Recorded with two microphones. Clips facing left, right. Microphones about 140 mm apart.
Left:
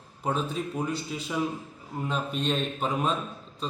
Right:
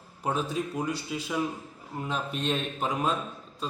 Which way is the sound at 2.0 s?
5° right (ahead or behind).